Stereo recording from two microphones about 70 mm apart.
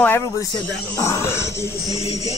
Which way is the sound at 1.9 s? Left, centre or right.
Right.